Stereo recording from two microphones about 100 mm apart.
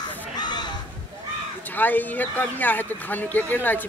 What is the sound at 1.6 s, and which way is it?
Speech, 20° left (ahead or behind).